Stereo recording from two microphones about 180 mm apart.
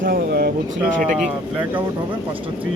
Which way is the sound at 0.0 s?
55° right (ahead or behind).